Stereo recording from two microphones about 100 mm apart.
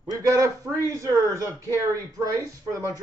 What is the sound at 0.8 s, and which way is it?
Speech, 35° right (ahead or behind).